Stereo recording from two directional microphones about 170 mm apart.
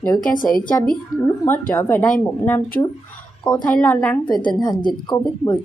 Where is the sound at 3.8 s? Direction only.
10° left (ahead or behind).